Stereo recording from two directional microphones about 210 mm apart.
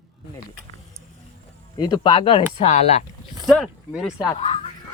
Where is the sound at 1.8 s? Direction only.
20° left (ahead or behind).